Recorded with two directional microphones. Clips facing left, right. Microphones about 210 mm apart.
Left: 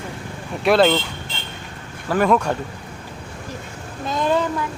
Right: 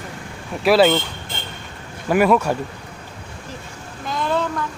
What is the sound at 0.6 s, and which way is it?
Speech, 5° right (ahead or behind).